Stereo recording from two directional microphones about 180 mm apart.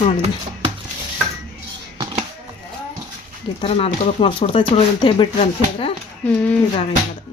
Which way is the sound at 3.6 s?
30° left (ahead or behind).